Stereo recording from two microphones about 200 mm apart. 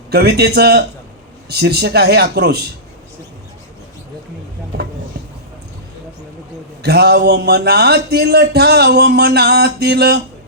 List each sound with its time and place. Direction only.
0.1 s speech: 55° right (ahead or behind)
6.8 s speech: 55° right (ahead or behind)